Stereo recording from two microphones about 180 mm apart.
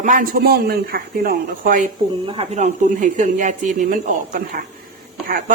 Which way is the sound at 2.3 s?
35° right (ahead or behind).